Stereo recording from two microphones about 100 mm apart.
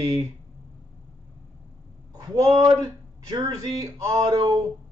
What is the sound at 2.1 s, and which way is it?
Speech, 40° right (ahead or behind).